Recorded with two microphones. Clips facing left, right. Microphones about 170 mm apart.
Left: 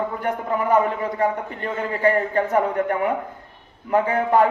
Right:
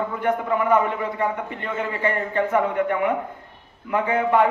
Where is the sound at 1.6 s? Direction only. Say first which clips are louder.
Left 4 dB; 40° left (ahead or behind).